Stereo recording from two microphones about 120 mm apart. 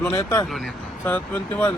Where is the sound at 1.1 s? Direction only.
15° left (ahead or behind).